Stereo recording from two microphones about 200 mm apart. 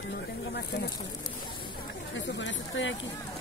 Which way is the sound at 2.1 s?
65° left (ahead or behind).